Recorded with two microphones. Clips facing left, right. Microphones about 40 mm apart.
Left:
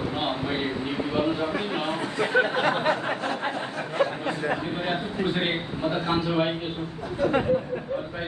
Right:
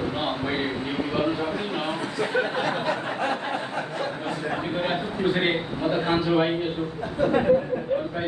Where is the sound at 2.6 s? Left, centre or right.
Left.